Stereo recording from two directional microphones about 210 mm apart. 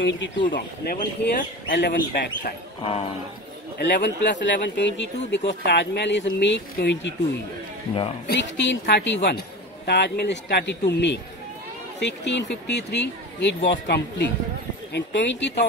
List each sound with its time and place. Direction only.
0.5 s speech: 45° left (ahead or behind)
2.4 s speech: 30° left (ahead or behind)
3.7 s speech: 55° left (ahead or behind)
8.3 s speech: 55° left (ahead or behind)